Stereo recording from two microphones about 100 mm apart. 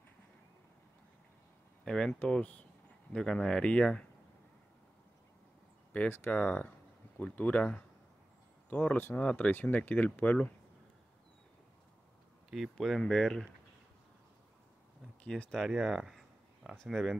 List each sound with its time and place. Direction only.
1.9 s speech: 5° left (ahead or behind)
5.9 s speech: 20° left (ahead or behind)
12.4 s speech: 5° right (ahead or behind)
15.2 s speech: 5° left (ahead or behind)